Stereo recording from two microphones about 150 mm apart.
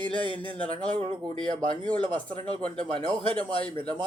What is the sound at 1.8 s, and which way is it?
Speech, 30° right (ahead or behind).